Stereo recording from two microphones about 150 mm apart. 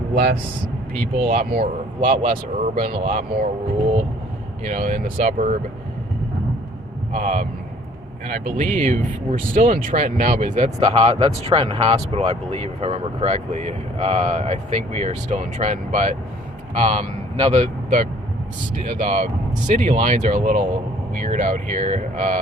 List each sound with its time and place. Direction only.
0.1 s speech: 90° right
0.9 s speech: 65° right (ahead or behind)
4.6 s speech: 60° right (ahead or behind)
7.1 s speech: 55° right (ahead or behind)
10.8 s speech: 40° right (ahead or behind); by 22.4 s 55° right (ahead or behind)